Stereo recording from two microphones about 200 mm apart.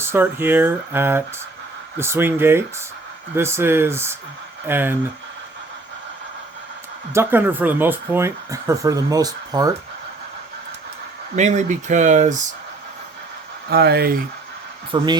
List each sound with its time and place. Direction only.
0.0 s speech: 10° right (ahead or behind)
7.1 s speech: 10° right (ahead or behind)
11.3 s speech: 35° right (ahead or behind)
13.7 s speech: 50° right (ahead or behind)
14.9 s speech: 25° right (ahead or behind)